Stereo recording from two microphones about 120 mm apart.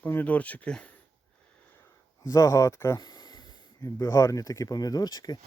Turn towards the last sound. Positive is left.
turn(degrees=35)  # may be behind; listen again after turning